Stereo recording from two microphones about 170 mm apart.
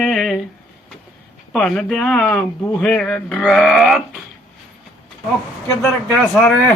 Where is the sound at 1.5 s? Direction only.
5° left (ahead or behind).